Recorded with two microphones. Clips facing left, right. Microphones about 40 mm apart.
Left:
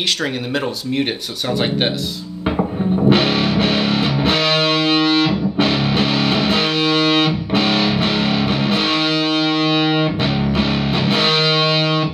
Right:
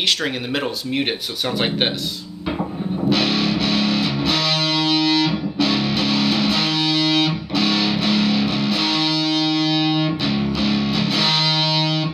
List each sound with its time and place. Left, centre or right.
3.0 s music: left